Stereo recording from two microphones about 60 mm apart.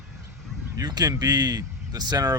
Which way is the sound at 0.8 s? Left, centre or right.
Right.